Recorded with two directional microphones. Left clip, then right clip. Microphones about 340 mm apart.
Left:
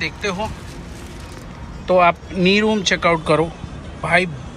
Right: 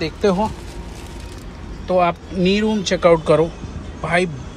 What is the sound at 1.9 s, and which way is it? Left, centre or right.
Speech, centre.